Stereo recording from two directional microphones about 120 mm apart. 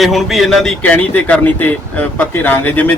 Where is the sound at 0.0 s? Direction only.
Centre (ahead or behind).